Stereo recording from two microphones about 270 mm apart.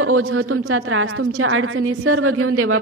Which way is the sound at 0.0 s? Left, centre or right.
Right.